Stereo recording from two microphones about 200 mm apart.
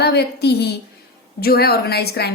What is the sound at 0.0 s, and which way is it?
A woman's voice, 55° left (ahead or behind).